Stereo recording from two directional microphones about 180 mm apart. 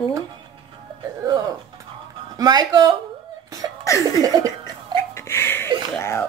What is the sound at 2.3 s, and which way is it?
Speech, 20° right (ahead or behind).